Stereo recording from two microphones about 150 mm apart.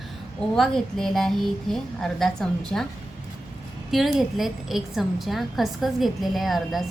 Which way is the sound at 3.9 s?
Centre (ahead or behind).